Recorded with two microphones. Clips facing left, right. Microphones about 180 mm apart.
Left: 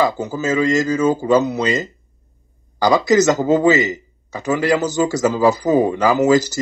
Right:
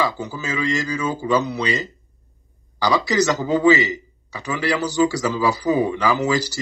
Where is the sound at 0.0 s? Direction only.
45° left (ahead or behind).